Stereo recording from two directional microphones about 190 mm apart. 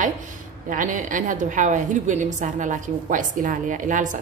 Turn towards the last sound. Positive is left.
turn(degrees=-45)  # may be behind; listen again after turning